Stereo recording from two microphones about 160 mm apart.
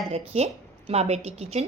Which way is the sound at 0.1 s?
40° right (ahead or behind).